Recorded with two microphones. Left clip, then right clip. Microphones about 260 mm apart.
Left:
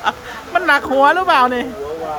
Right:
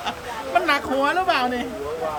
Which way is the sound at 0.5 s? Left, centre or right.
Centre.